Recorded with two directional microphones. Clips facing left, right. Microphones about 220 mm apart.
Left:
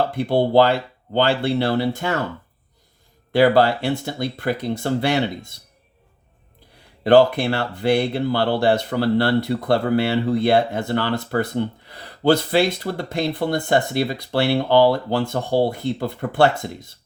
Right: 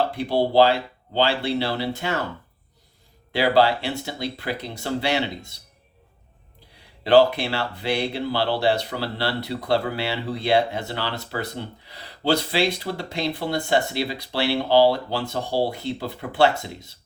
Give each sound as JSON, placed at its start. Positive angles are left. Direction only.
{"t": 0.1, "sound": "speech", "side_deg": 55}
{"t": 3.3, "sound": "speech", "side_deg": 50}
{"t": 7.0, "sound": "speech", "side_deg": 50}